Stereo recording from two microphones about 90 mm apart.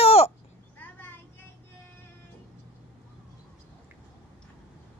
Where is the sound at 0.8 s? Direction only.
20° left (ahead or behind).